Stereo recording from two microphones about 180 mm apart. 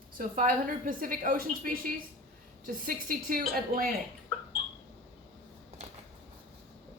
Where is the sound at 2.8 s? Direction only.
55° right (ahead or behind).